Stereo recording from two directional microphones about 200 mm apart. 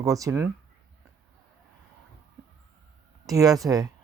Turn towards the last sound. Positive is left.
turn(degrees=-15)  # may be behind; listen again after turning